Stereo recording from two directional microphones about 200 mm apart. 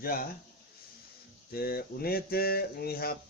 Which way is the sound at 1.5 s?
50° left (ahead or behind).